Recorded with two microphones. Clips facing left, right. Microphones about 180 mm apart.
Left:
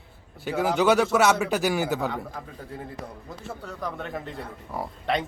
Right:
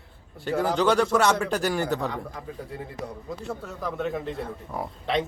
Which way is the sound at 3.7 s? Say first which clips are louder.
Right 3 dB; centre (ahead or behind).